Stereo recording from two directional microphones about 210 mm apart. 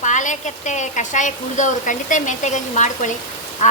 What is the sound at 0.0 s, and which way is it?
A woman's voice, 35° left (ahead or behind).